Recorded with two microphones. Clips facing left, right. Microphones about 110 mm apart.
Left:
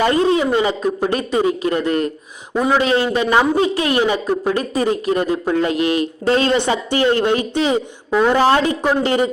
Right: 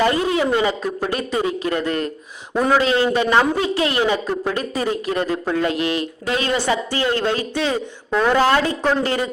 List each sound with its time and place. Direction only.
0.0 s a man's voice: 30° left (ahead or behind)
2.5 s speech: 5° left (ahead or behind)
3.1 s a man's voice: 15° left (ahead or behind)
4.5 s a man's voice: 30° left (ahead or behind)
6.7 s a man's voice: 25° left (ahead or behind)
8.4 s a man's voice: 25° left (ahead or behind)